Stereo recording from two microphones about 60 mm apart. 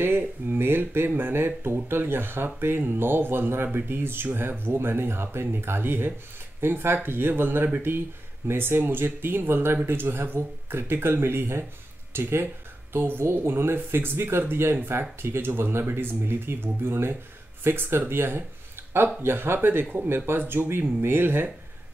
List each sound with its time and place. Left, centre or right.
0.0 s speech: right